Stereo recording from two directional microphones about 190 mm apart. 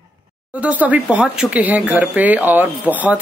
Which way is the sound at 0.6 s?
10° right (ahead or behind).